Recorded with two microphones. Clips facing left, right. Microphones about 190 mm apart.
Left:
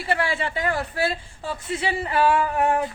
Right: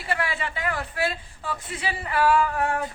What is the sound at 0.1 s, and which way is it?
A woman's voice, 30° left (ahead or behind).